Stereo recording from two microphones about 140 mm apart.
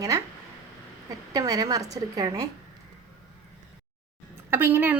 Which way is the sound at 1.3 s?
25° right (ahead or behind).